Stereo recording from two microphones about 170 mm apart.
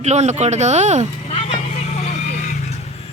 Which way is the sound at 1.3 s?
35° left (ahead or behind).